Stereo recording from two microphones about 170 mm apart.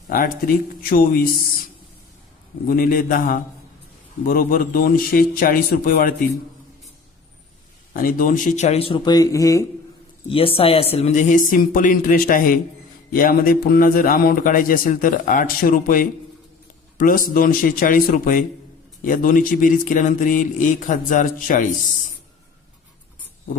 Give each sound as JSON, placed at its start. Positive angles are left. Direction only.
{"t": 0.1, "sound": "a man's voice", "side_deg": 55}
{"t": 2.6, "sound": "a man's voice", "side_deg": 55}
{"t": 7.9, "sound": "speech", "side_deg": 55}
{"t": 10.2, "sound": "a man's voice", "side_deg": 35}